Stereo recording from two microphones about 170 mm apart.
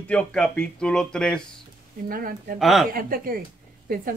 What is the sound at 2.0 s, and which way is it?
Speech, 55° right (ahead or behind).